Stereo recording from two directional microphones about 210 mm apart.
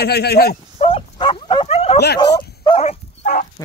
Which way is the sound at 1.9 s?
50° left (ahead or behind).